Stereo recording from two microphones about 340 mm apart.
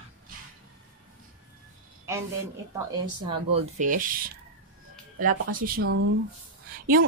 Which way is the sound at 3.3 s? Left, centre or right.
Centre.